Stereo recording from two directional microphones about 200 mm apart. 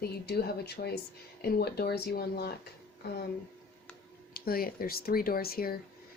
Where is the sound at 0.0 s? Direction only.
50° left (ahead or behind).